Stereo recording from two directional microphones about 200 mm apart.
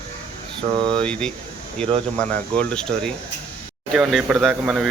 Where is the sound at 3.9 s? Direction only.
Centre (ahead or behind).